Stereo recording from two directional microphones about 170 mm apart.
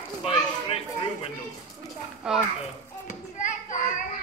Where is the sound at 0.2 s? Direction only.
35° left (ahead or behind).